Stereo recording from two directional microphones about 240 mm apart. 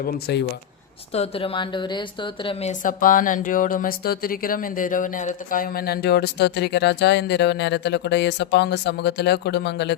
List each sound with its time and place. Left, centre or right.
0.0 s speech: left
1.1 s a woman's voice: left